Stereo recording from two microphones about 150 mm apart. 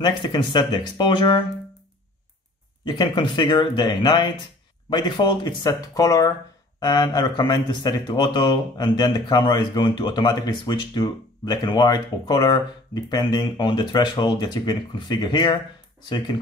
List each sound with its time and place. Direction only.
0.0 s speech: 30° left (ahead or behind)
2.8 s speech: 30° left (ahead or behind)